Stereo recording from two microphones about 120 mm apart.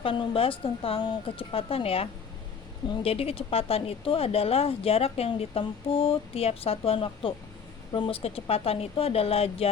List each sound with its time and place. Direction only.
0.0 s speech: 50° left (ahead or behind)